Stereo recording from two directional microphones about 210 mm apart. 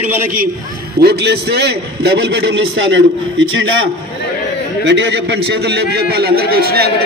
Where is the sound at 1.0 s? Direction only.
50° right (ahead or behind).